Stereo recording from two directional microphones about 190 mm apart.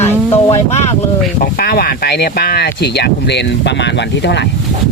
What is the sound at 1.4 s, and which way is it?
Speech, 50° left (ahead or behind).